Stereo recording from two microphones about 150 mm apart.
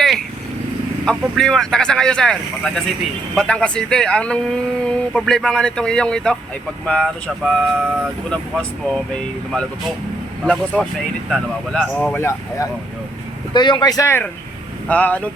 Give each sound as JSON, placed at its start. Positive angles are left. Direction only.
{"t": 1.0, "sound": "speech", "side_deg": 5}
{"t": 10.4, "sound": "speech", "side_deg": 5}
{"t": 13.5, "sound": "speech", "side_deg": 30}